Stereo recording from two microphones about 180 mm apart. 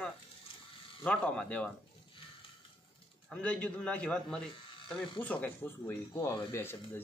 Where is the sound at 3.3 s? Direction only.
5° left (ahead or behind).